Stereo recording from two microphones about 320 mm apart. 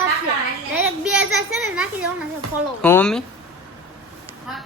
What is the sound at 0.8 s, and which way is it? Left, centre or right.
Speech, centre.